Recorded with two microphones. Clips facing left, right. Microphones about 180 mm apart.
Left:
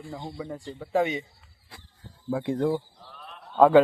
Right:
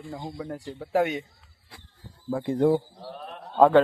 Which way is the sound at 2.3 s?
Centre (ahead or behind).